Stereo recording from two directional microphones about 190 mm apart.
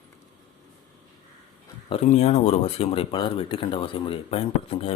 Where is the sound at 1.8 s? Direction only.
35° left (ahead or behind).